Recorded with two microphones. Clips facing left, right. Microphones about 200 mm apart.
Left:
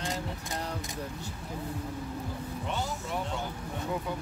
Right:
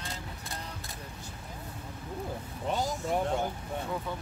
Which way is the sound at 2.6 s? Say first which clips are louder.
Right 6 dB; 40° right (ahead or behind).